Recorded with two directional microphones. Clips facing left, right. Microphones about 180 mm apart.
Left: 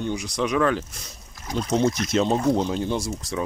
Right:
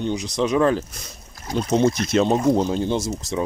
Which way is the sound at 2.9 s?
25° right (ahead or behind).